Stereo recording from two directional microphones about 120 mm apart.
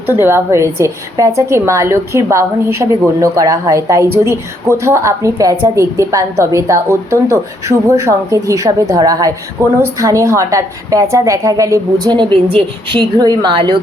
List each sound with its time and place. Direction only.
0.1 s a woman's voice: 20° right (ahead or behind)
12.1 s a woman's voice: 45° right (ahead or behind)